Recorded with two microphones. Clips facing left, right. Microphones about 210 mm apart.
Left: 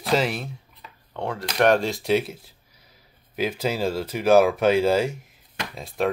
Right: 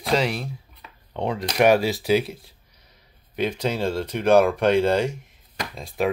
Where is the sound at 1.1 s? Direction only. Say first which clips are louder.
Right 2 dB; 15° right (ahead or behind).